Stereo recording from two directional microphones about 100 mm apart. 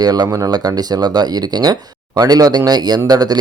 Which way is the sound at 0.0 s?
40° right (ahead or behind).